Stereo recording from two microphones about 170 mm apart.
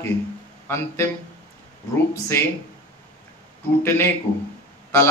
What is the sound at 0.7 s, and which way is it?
Speech, 15° left (ahead or behind).